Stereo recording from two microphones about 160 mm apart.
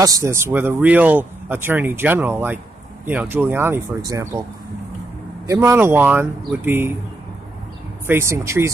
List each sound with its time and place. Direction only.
0.0 s speech: 20° right (ahead or behind)
5.5 s speech: 20° right (ahead or behind)
8.1 s speech: 15° right (ahead or behind)